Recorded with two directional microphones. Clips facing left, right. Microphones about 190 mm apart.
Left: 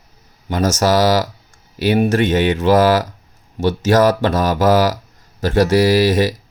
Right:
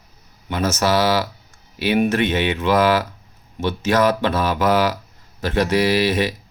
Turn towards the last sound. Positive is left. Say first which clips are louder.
# left 5 dB
turn(degrees=45)  # may be behind; listen again after turning